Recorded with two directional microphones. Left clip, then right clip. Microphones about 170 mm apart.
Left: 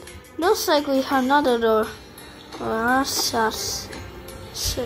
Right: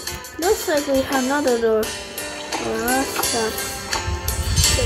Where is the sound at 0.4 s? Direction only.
Centre (ahead or behind).